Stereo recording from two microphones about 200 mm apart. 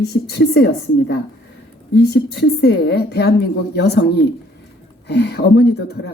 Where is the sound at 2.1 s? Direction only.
60° left (ahead or behind).